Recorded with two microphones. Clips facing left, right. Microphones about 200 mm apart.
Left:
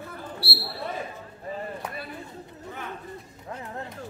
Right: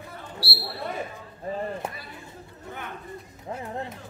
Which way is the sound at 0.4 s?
60° left (ahead or behind).